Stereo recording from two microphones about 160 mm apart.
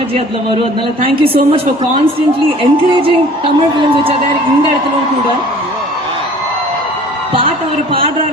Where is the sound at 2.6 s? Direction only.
35° right (ahead or behind).